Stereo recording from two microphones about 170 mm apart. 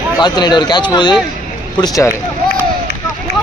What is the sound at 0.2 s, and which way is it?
A man's voice, 25° left (ahead or behind).